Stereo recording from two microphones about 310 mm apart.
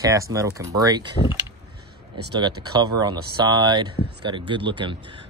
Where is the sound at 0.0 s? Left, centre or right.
Centre.